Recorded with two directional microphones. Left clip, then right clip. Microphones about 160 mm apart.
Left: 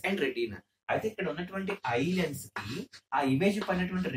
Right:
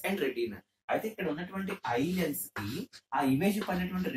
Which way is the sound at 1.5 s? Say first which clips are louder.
Left 4 dB; 15° left (ahead or behind).